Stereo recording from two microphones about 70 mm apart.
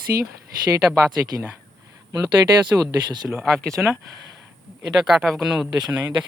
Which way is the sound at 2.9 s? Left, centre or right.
Right.